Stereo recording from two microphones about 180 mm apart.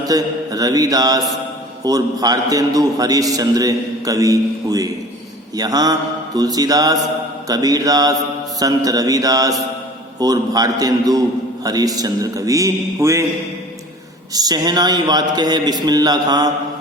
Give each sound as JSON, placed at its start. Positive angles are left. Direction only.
{"t": 0.0, "sound": "a man's voice", "side_deg": -20}
{"t": 14.3, "sound": "a man's voice", "side_deg": -20}